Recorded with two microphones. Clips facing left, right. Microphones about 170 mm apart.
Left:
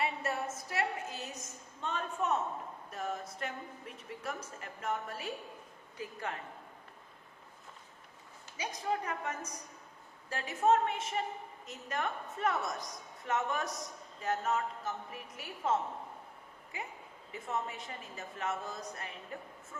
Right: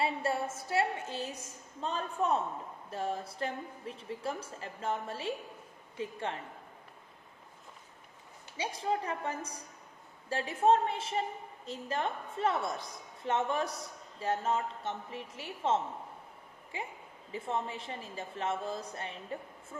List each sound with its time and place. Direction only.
0.0 s a sound: 30° right (ahead or behind)
0.5 s a woman's voice: 30° right (ahead or behind)
8.5 s a woman's voice: 30° right (ahead or behind)